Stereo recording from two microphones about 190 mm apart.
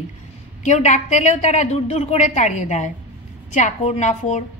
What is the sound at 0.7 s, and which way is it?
A woman's voice, 35° left (ahead or behind).